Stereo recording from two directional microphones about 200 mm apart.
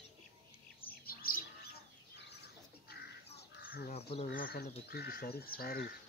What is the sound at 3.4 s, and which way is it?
Crow, 50° left (ahead or behind).